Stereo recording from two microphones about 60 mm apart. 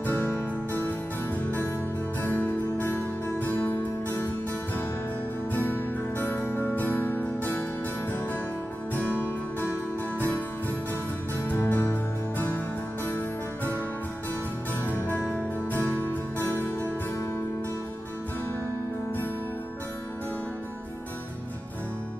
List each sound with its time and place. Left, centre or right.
0.0 s music: left
2.2 s music: left
5.5 s music: left
11.4 s music: left
15.7 s music: left
16.3 s music: right